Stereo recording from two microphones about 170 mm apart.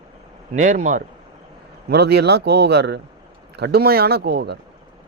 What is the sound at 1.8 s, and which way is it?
Speech, 70° right (ahead or behind).